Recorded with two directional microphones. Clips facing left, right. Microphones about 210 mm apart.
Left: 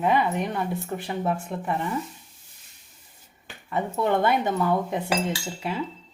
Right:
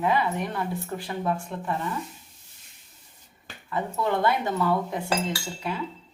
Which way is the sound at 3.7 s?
25° left (ahead or behind).